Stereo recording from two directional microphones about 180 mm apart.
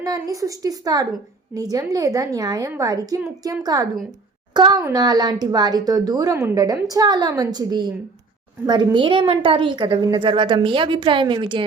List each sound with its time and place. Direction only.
0.0 s a woman's voice: 20° right (ahead or behind)